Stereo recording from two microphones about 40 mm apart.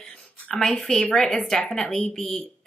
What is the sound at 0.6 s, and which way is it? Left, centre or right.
Speech, centre.